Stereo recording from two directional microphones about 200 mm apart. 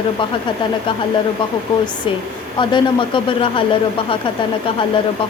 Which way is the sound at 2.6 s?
25° left (ahead or behind).